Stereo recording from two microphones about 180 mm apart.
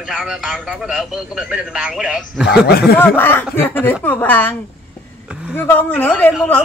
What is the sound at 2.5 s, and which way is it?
Speech, 60° left (ahead or behind).